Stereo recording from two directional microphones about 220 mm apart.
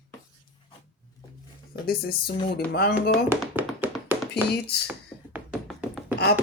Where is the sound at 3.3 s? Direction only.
10° right (ahead or behind).